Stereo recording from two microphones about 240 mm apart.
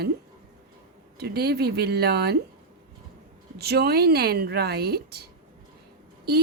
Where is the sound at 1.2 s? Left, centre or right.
Right.